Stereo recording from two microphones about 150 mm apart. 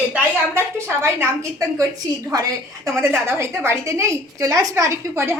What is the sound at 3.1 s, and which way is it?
A woman's voice, 15° right (ahead or behind).